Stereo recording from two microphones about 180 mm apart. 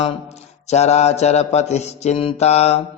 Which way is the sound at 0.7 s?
40° left (ahead or behind).